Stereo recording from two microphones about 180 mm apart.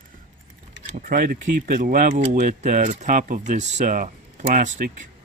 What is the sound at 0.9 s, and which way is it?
Speech, 50° right (ahead or behind).